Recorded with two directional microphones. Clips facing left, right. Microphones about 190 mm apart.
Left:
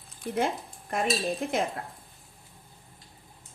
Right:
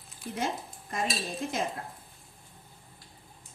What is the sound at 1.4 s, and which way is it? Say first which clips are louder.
Speech: left 3 dB; 55° left (ahead or behind).